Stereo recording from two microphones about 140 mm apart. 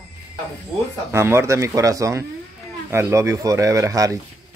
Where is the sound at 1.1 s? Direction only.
20° right (ahead or behind).